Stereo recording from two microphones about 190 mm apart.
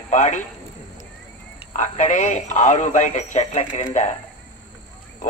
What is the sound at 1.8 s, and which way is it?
Speech, 40° left (ahead or behind).